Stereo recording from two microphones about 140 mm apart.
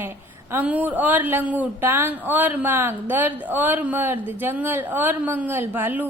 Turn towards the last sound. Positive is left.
turn(degrees=-15)  # may be behind; listen again after turning